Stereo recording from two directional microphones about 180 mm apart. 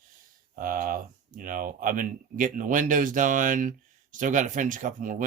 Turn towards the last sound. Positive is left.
turn(degrees=-45)  # may be behind; listen again after turning